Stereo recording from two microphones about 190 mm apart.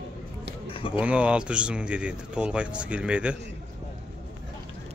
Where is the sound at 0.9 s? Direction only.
5° right (ahead or behind).